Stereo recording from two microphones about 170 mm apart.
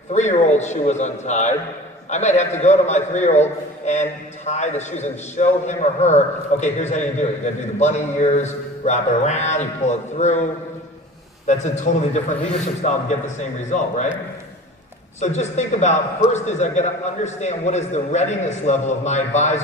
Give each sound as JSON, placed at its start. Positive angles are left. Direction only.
{"t": 0.1, "sound": "a man's voice", "side_deg": 40}
{"t": 11.4, "sound": "a man's voice", "side_deg": 40}
{"t": 15.1, "sound": "a man's voice", "side_deg": 45}